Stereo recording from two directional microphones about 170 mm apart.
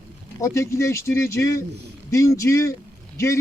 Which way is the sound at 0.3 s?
20° left (ahead or behind).